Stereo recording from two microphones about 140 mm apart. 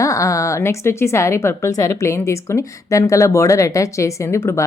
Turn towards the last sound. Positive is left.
turn(degrees=20)  # may be behind; listen again after turning